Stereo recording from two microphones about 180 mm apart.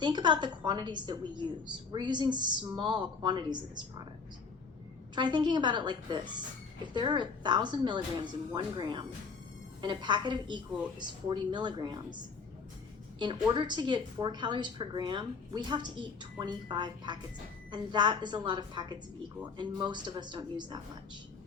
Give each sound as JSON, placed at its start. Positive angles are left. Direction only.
{"t": 0.0, "sound": "a woman's voice", "side_deg": -25}
{"t": 5.1, "sound": "a woman's voice", "side_deg": -25}
{"t": 13.5, "sound": "a woman's voice", "side_deg": -25}